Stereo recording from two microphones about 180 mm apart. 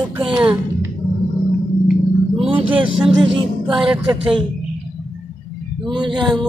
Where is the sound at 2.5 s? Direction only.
30° right (ahead or behind).